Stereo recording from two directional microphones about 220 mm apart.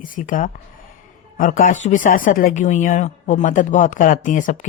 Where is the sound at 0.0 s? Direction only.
35° left (ahead or behind).